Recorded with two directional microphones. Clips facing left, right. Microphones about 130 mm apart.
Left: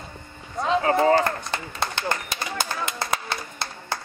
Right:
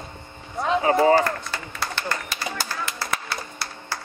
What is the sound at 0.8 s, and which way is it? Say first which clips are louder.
Speech: right 2 dB; 15° right (ahead or behind).